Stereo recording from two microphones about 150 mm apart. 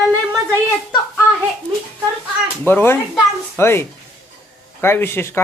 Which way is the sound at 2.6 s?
15° left (ahead or behind).